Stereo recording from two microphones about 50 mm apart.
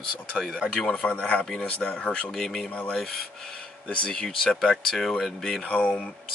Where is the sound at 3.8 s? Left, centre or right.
Left.